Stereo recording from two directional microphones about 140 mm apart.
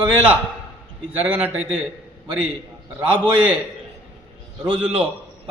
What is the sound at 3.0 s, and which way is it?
Speech, 10° right (ahead or behind).